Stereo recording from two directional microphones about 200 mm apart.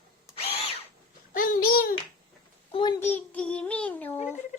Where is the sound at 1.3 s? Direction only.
45° left (ahead or behind).